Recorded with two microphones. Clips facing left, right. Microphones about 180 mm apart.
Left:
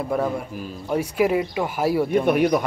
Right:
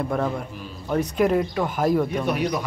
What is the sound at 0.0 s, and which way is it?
Speech, 5° left (ahead or behind).